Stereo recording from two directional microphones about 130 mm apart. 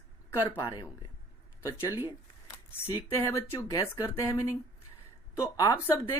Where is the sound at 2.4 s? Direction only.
20° left (ahead or behind).